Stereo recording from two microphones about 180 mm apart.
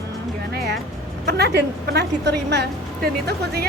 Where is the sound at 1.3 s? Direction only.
65° right (ahead or behind).